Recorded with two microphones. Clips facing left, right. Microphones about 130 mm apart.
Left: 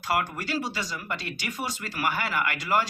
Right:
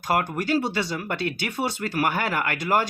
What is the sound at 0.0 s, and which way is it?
Speech, 45° right (ahead or behind).